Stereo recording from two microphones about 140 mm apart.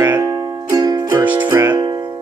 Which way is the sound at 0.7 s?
30° right (ahead or behind).